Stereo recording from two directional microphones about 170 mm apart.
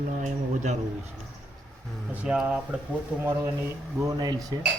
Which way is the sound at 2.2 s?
5° right (ahead or behind).